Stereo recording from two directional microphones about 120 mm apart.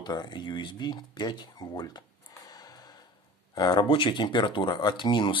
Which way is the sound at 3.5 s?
35° left (ahead or behind).